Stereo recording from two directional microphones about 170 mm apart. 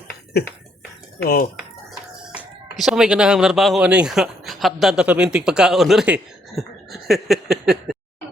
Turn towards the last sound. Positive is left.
turn(degrees=0)  # may be behind; listen again after turning